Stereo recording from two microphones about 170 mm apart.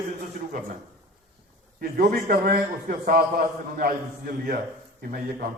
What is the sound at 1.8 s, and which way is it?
A man's voice, 60° right (ahead or behind).